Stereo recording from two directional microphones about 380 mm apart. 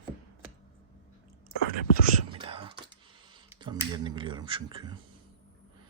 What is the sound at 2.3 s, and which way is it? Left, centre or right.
Whispering, centre.